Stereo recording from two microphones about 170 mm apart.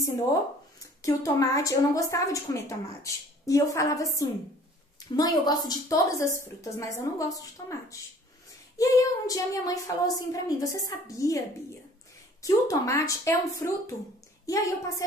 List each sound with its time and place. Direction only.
1.0 s a woman's voice: 20° left (ahead or behind)
8.7 s a woman's voice: 20° left (ahead or behind)